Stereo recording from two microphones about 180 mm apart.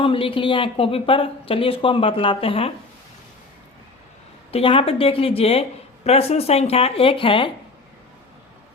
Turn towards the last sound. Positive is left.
turn(degrees=30)  # may be behind; listen again after turning